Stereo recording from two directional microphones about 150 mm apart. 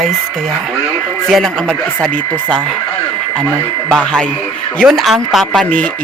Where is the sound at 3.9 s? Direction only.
5° left (ahead or behind).